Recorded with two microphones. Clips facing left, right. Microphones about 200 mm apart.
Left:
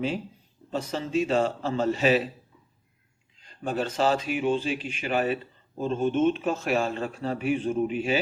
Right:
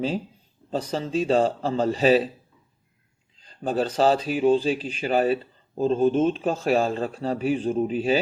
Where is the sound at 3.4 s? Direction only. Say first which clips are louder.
Right 4 dB; 35° right (ahead or behind).